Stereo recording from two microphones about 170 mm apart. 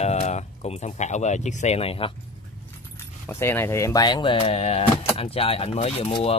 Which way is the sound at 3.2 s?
15° left (ahead or behind).